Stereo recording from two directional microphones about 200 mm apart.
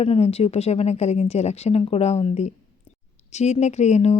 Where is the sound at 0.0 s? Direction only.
30° left (ahead or behind).